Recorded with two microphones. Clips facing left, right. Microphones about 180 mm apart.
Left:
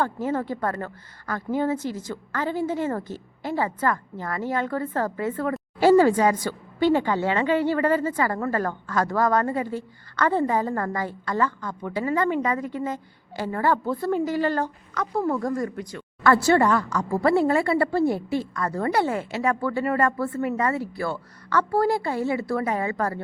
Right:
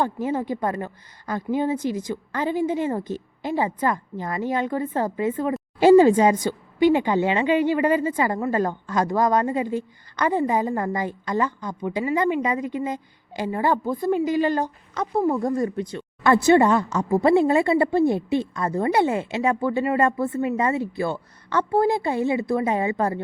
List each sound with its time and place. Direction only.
0.0 s speech: 15° right (ahead or behind)